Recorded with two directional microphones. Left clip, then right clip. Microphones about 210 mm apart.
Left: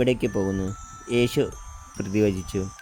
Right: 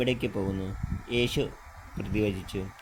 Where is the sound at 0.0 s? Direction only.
50° left (ahead or behind).